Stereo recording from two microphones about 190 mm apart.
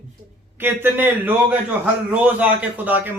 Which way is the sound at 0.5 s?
10° right (ahead or behind).